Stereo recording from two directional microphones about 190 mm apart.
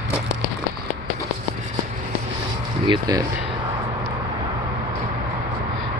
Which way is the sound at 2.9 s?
20° right (ahead or behind).